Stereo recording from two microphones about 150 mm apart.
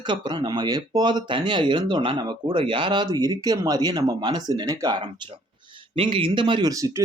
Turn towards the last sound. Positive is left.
turn(degrees=-20)  # may be behind; listen again after turning